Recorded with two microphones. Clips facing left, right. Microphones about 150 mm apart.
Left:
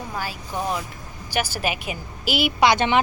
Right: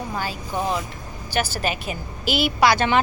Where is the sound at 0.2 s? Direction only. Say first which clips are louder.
Right 1 dB; 5° left (ahead or behind).